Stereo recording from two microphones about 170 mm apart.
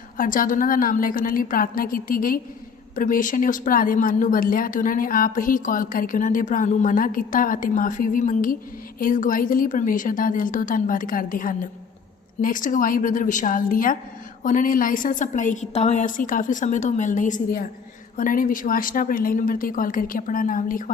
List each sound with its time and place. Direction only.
0.2 s a woman's voice: 55° left (ahead or behind)